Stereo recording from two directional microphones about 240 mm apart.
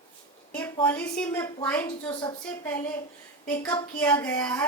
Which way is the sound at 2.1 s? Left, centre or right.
Centre.